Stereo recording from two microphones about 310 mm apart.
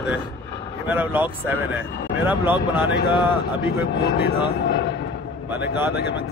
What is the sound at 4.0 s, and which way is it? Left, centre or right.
Speech, left.